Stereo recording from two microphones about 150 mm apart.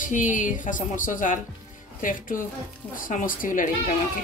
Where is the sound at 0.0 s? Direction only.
60° left (ahead or behind).